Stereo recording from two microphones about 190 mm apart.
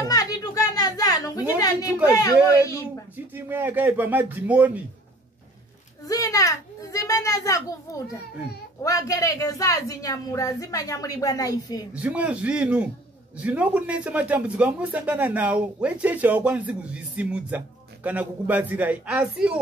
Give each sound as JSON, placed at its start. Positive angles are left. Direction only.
{"t": 0.0, "sound": "a sound", "side_deg": 20}
{"t": 2.0, "sound": "speech", "side_deg": 20}
{"t": 3.3, "sound": "speech", "side_deg": -10}
{"t": 6.0, "sound": "a woman's voice", "side_deg": 20}
{"t": 11.9, "sound": "speech", "side_deg": -5}